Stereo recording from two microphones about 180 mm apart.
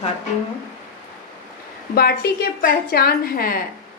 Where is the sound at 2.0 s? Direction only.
60° left (ahead or behind).